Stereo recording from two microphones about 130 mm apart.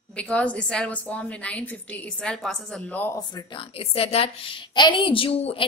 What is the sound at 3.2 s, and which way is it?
A woman's voice, 30° left (ahead or behind).